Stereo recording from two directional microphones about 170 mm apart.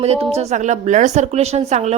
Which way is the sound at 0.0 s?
40° right (ahead or behind).